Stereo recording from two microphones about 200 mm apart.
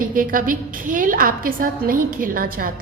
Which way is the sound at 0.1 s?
45° right (ahead or behind).